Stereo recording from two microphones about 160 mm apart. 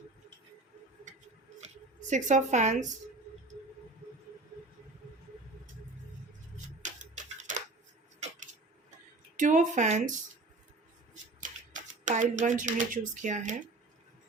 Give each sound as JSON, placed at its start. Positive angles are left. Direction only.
{"t": 1.6, "sound": "a sound", "side_deg": -50}
{"t": 6.8, "sound": "tick-tock", "side_deg": -50}
{"t": 9.4, "sound": "speech", "side_deg": -50}
{"t": 11.1, "sound": "shuffling cards", "side_deg": -50}